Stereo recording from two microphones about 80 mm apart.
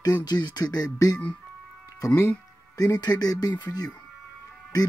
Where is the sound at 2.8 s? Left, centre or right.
Left.